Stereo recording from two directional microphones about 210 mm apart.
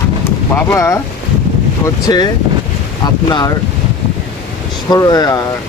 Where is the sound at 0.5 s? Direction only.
15° left (ahead or behind).